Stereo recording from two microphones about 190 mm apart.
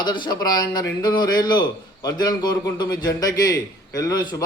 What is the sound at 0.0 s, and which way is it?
A man's voice, 25° left (ahead or behind).